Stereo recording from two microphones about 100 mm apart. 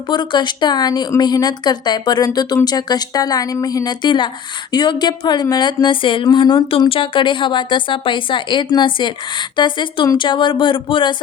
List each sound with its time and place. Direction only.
0.1 s speech: 50° left (ahead or behind)
6.7 s speech: 65° left (ahead or behind)